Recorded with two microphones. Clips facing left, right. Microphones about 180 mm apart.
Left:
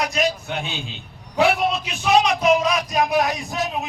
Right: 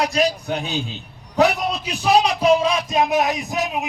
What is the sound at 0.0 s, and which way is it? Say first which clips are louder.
A man's voice: right 3 dB; 35° right (ahead or behind).